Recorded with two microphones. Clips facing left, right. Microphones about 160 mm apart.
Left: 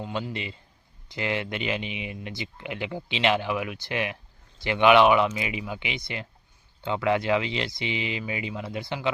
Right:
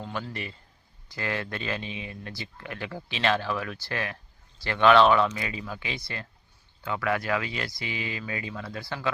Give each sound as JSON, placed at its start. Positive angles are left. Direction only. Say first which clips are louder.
{"t": 0.0, "sound": "speech", "louder": "left 3 dB", "side_deg": 15}